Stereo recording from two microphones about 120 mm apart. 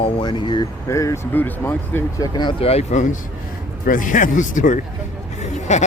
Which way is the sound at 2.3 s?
40° left (ahead or behind).